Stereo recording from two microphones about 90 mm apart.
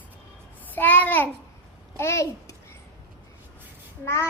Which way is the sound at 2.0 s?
30° left (ahead or behind).